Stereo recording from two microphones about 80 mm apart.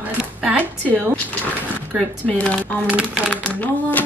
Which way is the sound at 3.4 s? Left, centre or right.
Left.